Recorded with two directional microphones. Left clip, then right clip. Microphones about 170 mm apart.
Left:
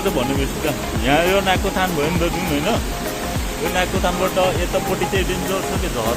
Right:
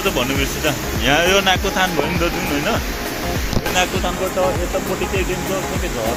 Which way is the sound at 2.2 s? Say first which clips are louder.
Right 1 dB; 20° left (ahead or behind).